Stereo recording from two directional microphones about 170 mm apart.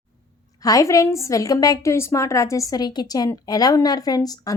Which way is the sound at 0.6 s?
20° left (ahead or behind).